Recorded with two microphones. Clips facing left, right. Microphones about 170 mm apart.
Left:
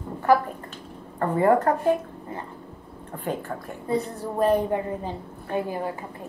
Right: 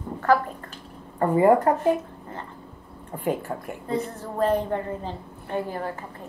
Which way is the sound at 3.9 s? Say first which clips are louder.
Left 2 dB; 15° left (ahead or behind).